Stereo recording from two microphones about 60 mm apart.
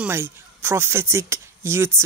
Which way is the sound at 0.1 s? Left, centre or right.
Right.